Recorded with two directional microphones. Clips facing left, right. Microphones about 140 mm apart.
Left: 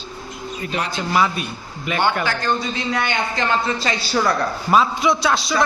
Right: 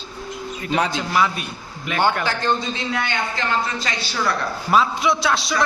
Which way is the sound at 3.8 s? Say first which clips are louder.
Left 5 dB; 40° left (ahead or behind).